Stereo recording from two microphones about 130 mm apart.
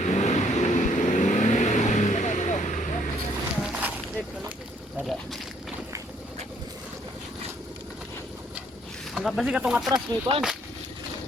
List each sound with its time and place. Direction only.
0.0 s vehicle: 65° left (ahead or behind)
3.7 s a sound: 10° right (ahead or behind)
9.1 s speech: centre (ahead or behind)
9.9 s speech: 35° right (ahead or behind)